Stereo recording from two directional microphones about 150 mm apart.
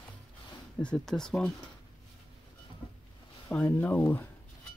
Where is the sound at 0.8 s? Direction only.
5° left (ahead or behind).